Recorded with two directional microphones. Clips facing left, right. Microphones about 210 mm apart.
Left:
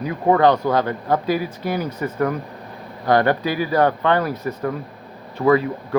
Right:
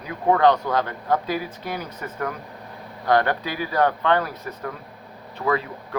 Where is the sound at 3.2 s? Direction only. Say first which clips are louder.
Left 6 dB; 10° left (ahead or behind).